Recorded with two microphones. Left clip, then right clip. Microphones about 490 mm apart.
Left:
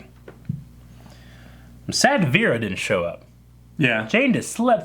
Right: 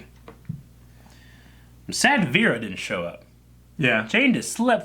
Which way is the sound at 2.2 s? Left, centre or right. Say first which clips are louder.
Left 1 dB; left.